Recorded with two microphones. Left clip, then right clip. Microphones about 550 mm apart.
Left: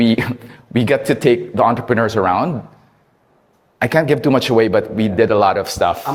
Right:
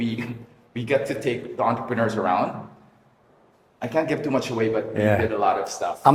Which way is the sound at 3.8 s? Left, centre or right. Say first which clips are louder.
Left 9 dB; left.